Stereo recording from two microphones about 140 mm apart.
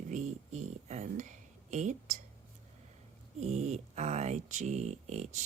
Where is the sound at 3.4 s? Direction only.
50° right (ahead or behind).